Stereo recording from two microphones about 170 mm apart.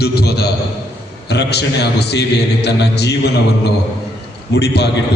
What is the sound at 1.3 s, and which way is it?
A man's voice, 80° left.